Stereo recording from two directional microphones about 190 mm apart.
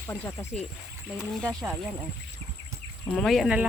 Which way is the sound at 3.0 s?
Centre (ahead or behind).